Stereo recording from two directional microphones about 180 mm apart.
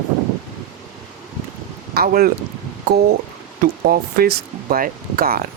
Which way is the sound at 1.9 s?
60° right (ahead or behind).